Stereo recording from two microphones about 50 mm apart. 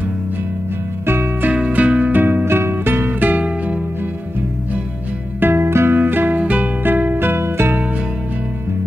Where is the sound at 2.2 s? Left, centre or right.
Right.